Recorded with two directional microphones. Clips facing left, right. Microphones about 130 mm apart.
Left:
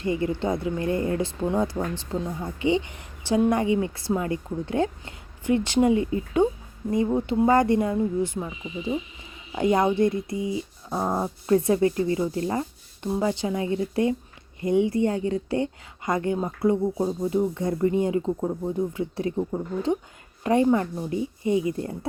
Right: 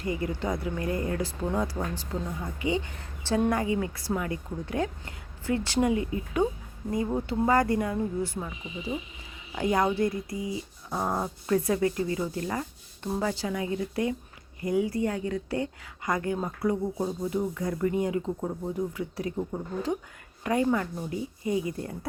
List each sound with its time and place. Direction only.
0.0 s a woman's voice: 25° left (ahead or behind)
7.1 s speech: 10° left (ahead or behind)
7.4 s a woman's voice: 25° left (ahead or behind)